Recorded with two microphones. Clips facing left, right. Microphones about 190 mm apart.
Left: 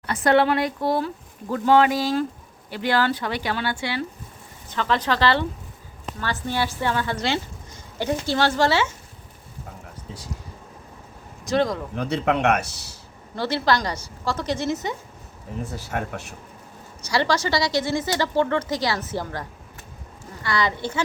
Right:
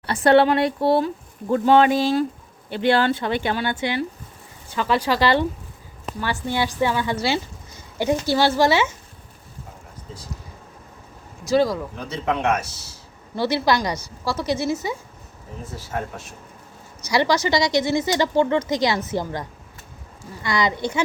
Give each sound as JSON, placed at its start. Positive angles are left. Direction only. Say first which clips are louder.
{"t": 0.0, "sound": "speech", "louder": "right 3 dB", "side_deg": -30}
{"t": 11.4, "sound": "speech", "louder": "right 3 dB", "side_deg": -5}
{"t": 11.9, "sound": "speech", "louder": "left 3 dB", "side_deg": 65}
{"t": 13.3, "sound": "speech", "louder": "right 2 dB", "side_deg": -10}
{"t": 15.7, "sound": "speech", "louder": "right 2 dB", "side_deg": 70}
{"t": 17.1, "sound": "speech", "louder": "right 3 dB", "side_deg": -15}